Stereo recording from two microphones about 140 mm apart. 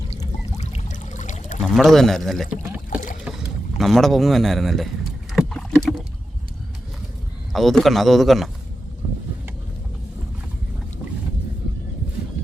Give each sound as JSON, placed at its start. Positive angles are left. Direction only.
{"t": 0.6, "sound": "pour", "side_deg": 55}
{"t": 1.6, "sound": "speech", "side_deg": 0}
{"t": 5.3, "sound": "rowboat", "side_deg": 0}
{"t": 7.5, "sound": "speech", "side_deg": 0}